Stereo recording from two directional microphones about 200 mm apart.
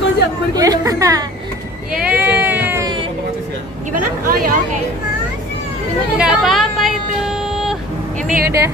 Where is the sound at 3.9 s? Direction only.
45° right (ahead or behind).